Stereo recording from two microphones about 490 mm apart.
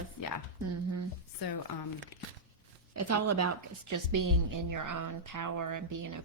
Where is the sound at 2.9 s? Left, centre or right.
Right.